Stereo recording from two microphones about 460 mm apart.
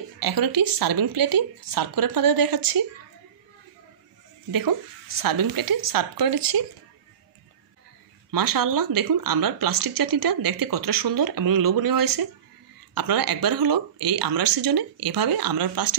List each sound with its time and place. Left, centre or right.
0.2 s speech: right
4.5 s speech: right
8.3 s speech: right